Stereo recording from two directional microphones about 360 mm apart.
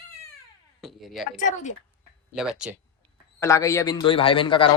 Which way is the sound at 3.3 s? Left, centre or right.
Centre.